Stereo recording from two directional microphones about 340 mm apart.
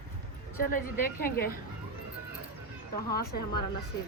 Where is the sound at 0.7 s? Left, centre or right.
Left.